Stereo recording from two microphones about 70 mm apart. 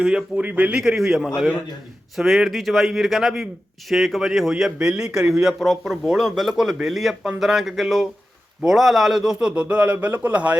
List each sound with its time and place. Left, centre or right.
0.0 s a man's voice: centre
0.8 s a man's voice: centre
9.6 s speech: centre